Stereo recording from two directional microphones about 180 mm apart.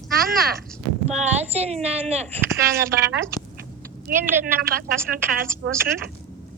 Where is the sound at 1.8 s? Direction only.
35° right (ahead or behind).